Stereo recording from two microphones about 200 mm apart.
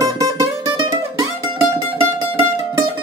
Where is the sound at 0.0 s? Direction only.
15° right (ahead or behind).